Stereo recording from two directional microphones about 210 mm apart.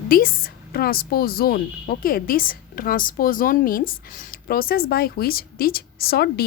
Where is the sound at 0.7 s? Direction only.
45° left (ahead or behind).